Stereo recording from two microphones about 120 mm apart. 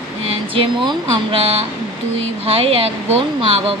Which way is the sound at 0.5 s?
50° right (ahead or behind).